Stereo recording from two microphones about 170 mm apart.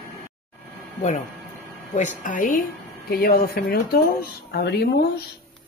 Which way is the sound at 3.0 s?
65° left (ahead or behind).